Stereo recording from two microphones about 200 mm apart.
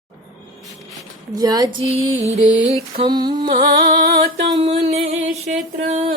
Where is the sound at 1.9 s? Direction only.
35° right (ahead or behind).